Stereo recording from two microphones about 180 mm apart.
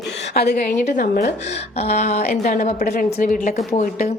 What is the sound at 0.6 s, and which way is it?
A woman's voice, 45° left (ahead or behind).